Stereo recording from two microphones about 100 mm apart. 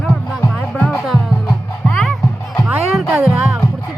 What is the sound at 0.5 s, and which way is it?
Music, 15° left (ahead or behind).